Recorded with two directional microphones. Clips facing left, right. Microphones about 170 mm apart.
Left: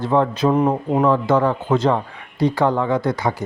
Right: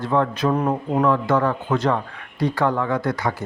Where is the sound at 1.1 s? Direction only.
25° left (ahead or behind).